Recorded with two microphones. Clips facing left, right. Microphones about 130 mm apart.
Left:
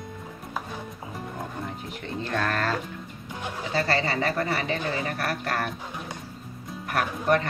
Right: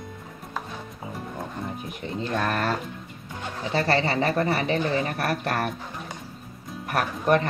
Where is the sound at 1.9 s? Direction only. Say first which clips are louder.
Right 2 dB; 20° right (ahead or behind).